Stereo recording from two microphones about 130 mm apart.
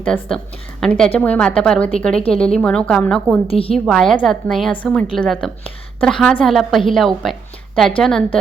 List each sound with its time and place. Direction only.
0.0 s a woman's voice: 5° left (ahead or behind)
3.4 s a woman's voice: 45° left (ahead or behind)
3.8 s a woman's voice: 5° left (ahead or behind)